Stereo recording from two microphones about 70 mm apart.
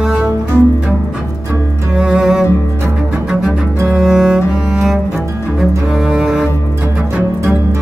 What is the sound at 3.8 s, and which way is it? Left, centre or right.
Cello, centre.